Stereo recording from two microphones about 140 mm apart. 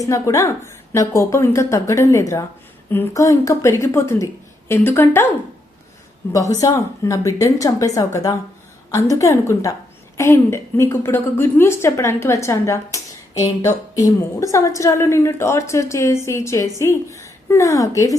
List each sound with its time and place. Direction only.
0.0 s a woman's voice: 20° left (ahead or behind)
6.3 s a woman's voice: 25° left (ahead or behind)